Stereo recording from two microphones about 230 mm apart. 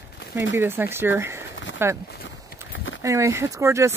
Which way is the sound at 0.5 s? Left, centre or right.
Centre.